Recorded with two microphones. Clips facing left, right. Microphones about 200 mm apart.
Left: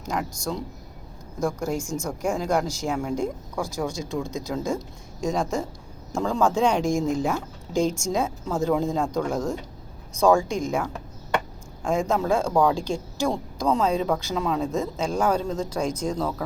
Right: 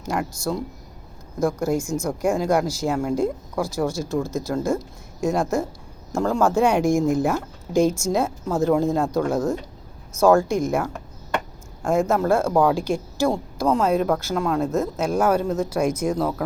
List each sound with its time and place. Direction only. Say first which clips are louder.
0.1 s speech: right 3 dB; 5° right (ahead or behind)